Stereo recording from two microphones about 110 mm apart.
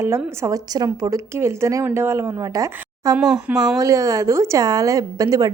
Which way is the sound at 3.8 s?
30° right (ahead or behind).